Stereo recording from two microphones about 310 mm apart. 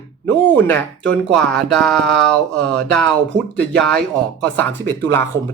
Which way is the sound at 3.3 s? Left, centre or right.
Right.